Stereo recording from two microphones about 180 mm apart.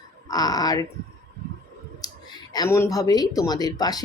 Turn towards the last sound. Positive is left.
turn(degrees=20)  # may be behind; listen again after turning